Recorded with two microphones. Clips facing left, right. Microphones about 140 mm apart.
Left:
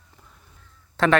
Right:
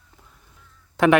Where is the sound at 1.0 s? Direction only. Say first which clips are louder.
Right 4 dB; 15° right (ahead or behind).